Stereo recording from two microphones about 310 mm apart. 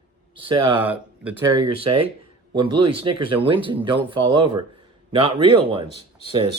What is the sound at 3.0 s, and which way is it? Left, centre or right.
Speech, centre.